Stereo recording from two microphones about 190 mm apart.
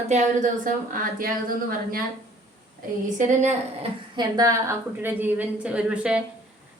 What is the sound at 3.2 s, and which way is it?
Speech, 40° right (ahead or behind).